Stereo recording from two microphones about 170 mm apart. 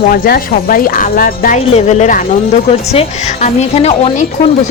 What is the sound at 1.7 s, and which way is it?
A woman's voice, 40° left (ahead or behind).